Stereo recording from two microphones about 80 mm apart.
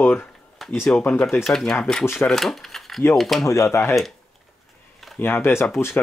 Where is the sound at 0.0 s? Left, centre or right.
Left.